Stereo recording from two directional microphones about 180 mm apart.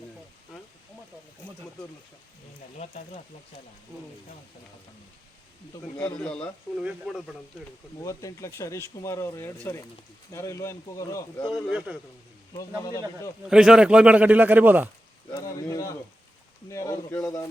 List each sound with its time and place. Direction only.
2.7 s speech: 40° left (ahead or behind)
6.0 s speech: 5° left (ahead or behind)
8.0 s speech: 20° left (ahead or behind)
11.5 s speech: 5° right (ahead or behind)
12.5 s speech: 20° left (ahead or behind)
13.5 s a man's voice: 5° right (ahead or behind)
15.3 s a sound: 20° left (ahead or behind)
16.6 s speech: 15° left (ahead or behind)